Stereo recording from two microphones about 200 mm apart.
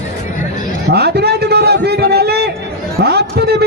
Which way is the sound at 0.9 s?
55° right (ahead or behind).